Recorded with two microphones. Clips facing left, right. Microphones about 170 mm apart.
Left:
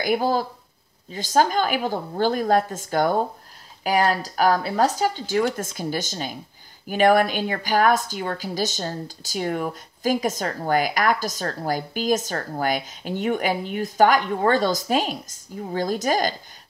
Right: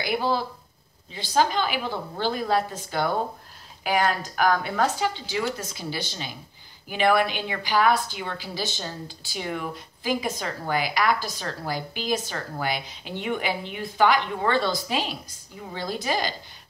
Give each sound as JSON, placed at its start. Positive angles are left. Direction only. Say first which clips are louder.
{"t": 0.0, "sound": "speech", "louder": "left 4 dB", "side_deg": 45}